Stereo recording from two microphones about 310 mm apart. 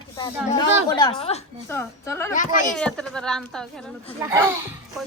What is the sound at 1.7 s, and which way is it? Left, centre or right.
A woman's voice, centre.